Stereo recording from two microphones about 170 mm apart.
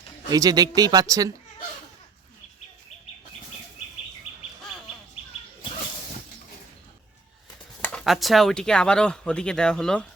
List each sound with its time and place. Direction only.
0.3 s speech: 20° right (ahead or behind)
7.8 s a sound: 10° left (ahead or behind)
8.0 s speech: centre (ahead or behind)